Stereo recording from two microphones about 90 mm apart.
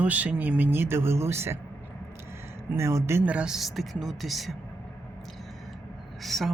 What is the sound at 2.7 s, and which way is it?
Speech, 30° right (ahead or behind).